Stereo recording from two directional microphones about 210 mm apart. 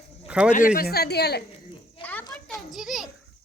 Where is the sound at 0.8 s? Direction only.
50° left (ahead or behind).